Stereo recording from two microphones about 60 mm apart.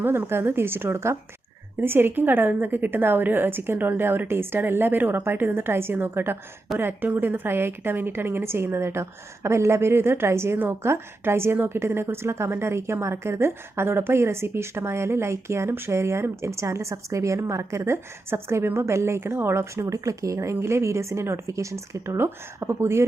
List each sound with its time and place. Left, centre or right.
0.0 s a woman's voice: right
22.2 s a woman's voice: right